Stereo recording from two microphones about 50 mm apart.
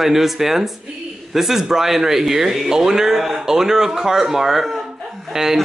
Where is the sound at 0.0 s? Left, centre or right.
Centre.